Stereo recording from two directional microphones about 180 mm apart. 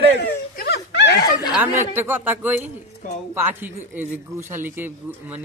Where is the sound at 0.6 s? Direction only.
70° left (ahead or behind).